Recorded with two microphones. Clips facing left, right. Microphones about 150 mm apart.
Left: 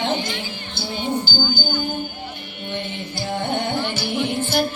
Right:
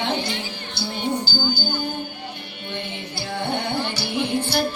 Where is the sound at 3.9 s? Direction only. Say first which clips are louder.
Left 1 dB; 45° left (ahead or behind).